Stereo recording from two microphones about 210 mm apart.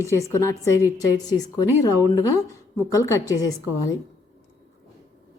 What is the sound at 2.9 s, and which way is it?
Speech, 15° left (ahead or behind).